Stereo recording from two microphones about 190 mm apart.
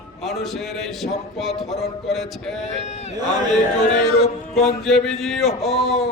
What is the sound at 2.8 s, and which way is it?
Speech, 35° left (ahead or behind).